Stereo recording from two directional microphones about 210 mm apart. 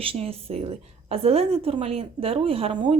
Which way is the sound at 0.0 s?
25° right (ahead or behind).